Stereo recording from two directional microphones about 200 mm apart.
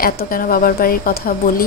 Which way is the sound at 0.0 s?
45° left (ahead or behind).